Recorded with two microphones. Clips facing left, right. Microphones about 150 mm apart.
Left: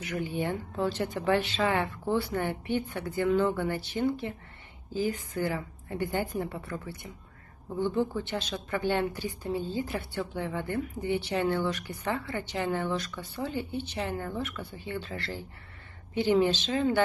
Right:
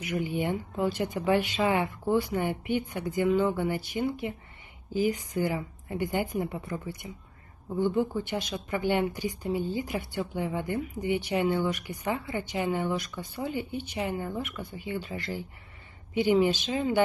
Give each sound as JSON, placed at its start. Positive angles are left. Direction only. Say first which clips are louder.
{"t": 0.0, "sound": "speech", "louder": "right 2 dB", "side_deg": -15}